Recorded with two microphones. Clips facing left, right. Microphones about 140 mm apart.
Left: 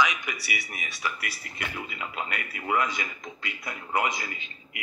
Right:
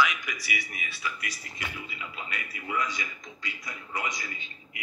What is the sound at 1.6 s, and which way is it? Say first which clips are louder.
Speech: left 5 dB; 60° left (ahead or behind).